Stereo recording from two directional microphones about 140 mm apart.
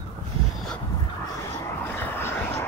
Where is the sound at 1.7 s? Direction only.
15° left (ahead or behind).